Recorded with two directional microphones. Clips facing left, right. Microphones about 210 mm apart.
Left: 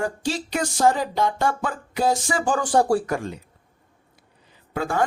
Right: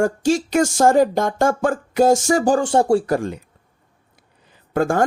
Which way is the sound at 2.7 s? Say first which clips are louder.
Right 3 dB; 25° right (ahead or behind).